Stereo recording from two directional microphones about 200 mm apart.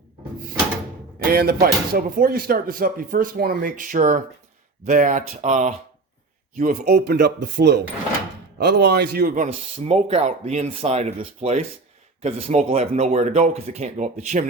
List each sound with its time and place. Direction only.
1.3 s a man's voice: 50° right (ahead or behind)